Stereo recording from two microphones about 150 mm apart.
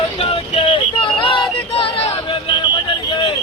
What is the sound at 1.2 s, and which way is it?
Music, 35° left (ahead or behind).